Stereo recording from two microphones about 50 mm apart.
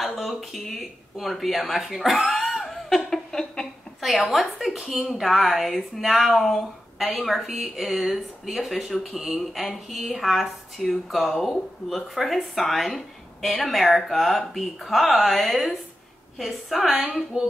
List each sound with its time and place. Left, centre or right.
0.0 s a woman's voice: centre
2.3 s a sound: centre
4.3 s a woman's voice: centre
17.3 s speech: centre